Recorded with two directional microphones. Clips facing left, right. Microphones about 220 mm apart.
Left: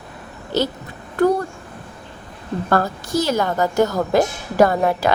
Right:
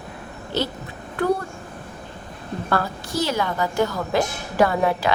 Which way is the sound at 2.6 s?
45° left (ahead or behind).